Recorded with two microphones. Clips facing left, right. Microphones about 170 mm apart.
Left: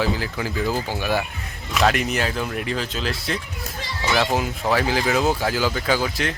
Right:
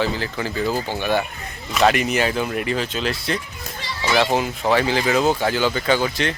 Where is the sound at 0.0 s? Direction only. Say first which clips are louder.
Right 1 dB; 5° left (ahead or behind).